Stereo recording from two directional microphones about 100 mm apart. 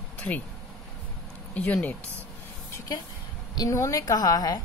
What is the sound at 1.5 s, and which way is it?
Speech, 15° left (ahead or behind).